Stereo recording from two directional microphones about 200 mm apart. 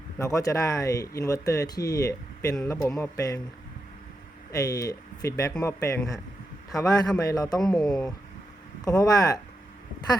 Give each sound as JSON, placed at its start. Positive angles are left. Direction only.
{"t": 0.2, "sound": "speech", "side_deg": 15}
{"t": 4.5, "sound": "a man's voice", "side_deg": 20}
{"t": 7.6, "sound": "speech", "side_deg": 0}
{"t": 8.8, "sound": "speech", "side_deg": 20}